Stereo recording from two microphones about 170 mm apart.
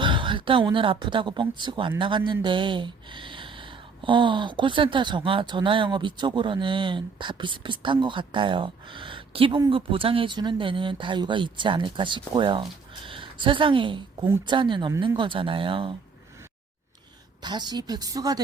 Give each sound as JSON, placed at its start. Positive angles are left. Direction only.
{"t": 0.0, "sound": "speech", "side_deg": -30}
{"t": 17.4, "sound": "speech", "side_deg": -25}